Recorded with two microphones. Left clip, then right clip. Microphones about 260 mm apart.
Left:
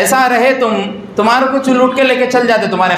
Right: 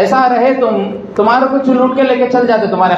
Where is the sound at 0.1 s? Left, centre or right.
Left.